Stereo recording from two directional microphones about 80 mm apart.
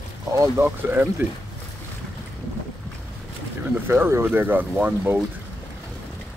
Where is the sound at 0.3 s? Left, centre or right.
Right.